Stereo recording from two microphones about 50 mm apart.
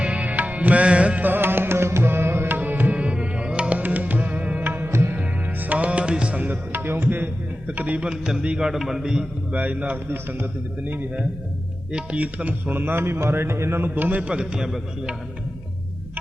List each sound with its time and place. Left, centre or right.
0.0 s music: right
1.2 s music: right
2.6 s music: right
4.9 s music: right
5.1 s music: right
6.7 s music: right
7.7 s speech: right
8.7 s a man's voice: centre
9.5 s speech: right
10.1 s a man's voice: right
11.9 s speech: right
12.7 s a man's voice: right
13.9 s a man's voice: right
14.2 s speech: right